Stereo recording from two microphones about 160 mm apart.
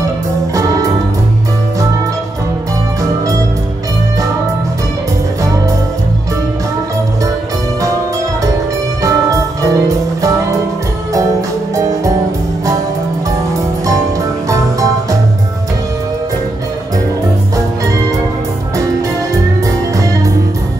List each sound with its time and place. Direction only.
9.0 s music: 20° right (ahead or behind)
14.5 s music: 20° right (ahead or behind)